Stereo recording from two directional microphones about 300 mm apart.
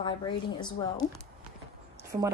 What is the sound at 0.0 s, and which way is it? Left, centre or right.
A woman's voice, centre.